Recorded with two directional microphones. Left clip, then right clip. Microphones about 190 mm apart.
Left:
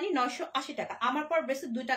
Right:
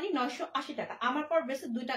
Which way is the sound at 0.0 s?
30° left (ahead or behind).